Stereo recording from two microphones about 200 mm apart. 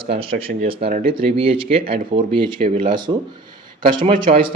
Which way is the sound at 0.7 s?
30° right (ahead or behind).